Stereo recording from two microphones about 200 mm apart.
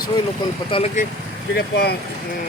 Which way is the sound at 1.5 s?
55° left (ahead or behind).